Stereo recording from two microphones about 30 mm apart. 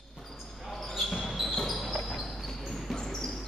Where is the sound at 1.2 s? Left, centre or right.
Centre.